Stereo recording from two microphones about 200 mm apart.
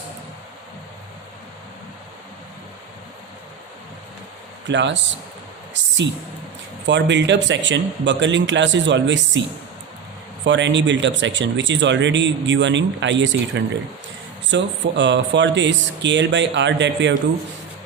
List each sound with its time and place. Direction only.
4.7 s speech: 65° right (ahead or behind)
5.7 s a sound: 65° right (ahead or behind)
6.8 s speech: 60° right (ahead or behind)
10.4 s speech: 65° right (ahead or behind)